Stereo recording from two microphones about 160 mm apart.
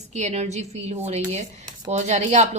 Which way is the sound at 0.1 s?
45° right (ahead or behind).